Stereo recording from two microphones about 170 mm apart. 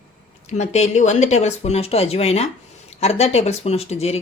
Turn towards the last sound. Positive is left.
turn(degrees=40)  # may be behind; listen again after turning